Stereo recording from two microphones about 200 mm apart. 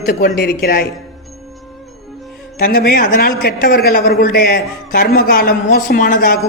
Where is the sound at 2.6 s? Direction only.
50° left (ahead or behind).